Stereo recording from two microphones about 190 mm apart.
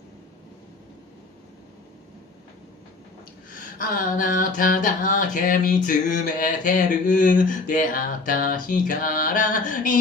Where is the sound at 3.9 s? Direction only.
45° left (ahead or behind).